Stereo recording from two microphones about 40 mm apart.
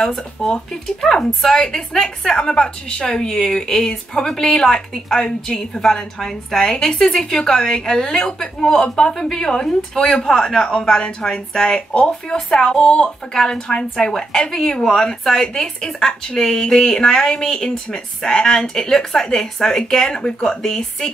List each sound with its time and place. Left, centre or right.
0.4 s a woman's voice: centre